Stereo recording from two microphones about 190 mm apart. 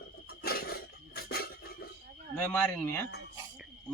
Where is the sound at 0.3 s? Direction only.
55° left (ahead or behind).